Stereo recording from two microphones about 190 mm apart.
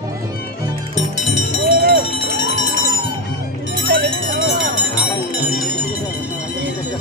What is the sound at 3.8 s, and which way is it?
Music, 55° right (ahead or behind).